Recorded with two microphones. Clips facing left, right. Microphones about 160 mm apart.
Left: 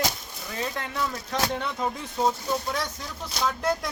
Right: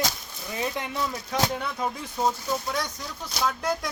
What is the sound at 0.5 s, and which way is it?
Speech, 15° right (ahead or behind).